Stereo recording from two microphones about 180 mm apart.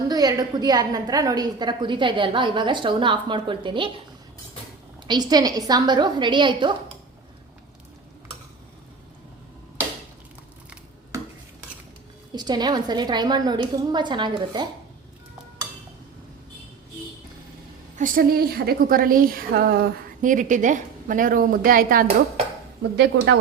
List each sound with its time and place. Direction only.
0.1 s a woman's voice: 20° right (ahead or behind)
5.0 s a woman's voice: 25° right (ahead or behind)
12.3 s a woman's voice: 25° right (ahead or behind)
17.9 s a woman's voice: 50° right (ahead or behind)
20.2 s a woman's voice: 45° right (ahead or behind)
23.0 s speech: 70° right (ahead or behind)